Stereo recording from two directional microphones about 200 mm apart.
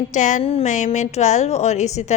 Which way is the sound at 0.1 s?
40° left (ahead or behind).